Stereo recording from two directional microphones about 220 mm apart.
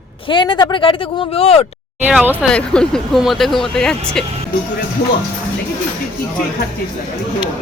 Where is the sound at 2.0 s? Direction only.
5° right (ahead or behind).